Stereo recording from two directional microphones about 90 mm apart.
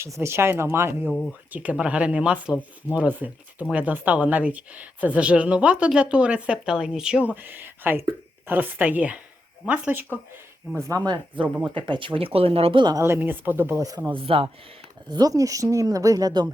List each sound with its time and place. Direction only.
0.0 s speech: 30° right (ahead or behind); by 7.2 s 10° right (ahead or behind)
7.3 s speech: 20° right (ahead or behind)
11.0 s speech: 60° right (ahead or behind)
11.4 s speech: 20° right (ahead or behind)
11.7 s speech: 65° right (ahead or behind); by 12.8 s 90° right
13.0 s speech: 25° right (ahead or behind)
14.1 s speech: 75° right (ahead or behind)
15.1 s speech: 45° right (ahead or behind)